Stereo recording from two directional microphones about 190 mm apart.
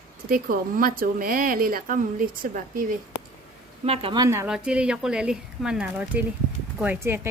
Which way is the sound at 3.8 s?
30° right (ahead or behind).